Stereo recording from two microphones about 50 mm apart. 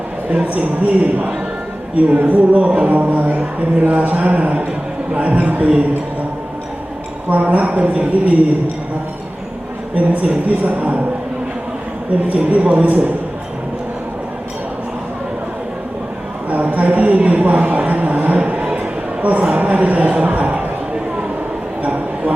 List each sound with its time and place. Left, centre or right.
0.4 s speech: right
7.3 s speech: right
9.9 s speech: right
12.3 s speech: right
16.5 s speech: right
18.3 s a sound: right
19.2 s speech: right
21.8 s a sound: right